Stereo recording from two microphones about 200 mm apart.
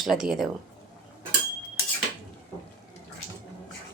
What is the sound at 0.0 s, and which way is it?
Speech, centre (ahead or behind).